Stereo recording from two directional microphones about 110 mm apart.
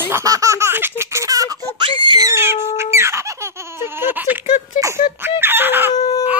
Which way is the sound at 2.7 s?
25° right (ahead or behind).